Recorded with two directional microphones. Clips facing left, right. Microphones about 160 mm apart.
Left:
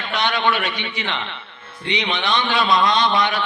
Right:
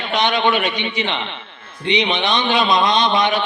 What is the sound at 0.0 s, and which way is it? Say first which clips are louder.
A man's voice: right 3 dB; 20° right (ahead or behind).